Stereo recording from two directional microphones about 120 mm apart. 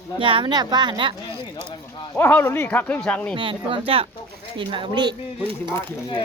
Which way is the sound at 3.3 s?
45° right (ahead or behind).